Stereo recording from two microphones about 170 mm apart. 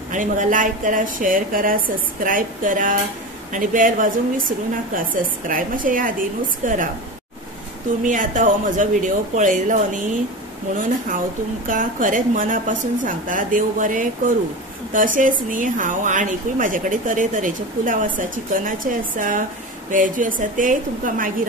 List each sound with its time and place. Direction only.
0.1 s speech: 50° right (ahead or behind)
8.0 s speech: 50° right (ahead or behind)
11.6 s speech: 50° right (ahead or behind)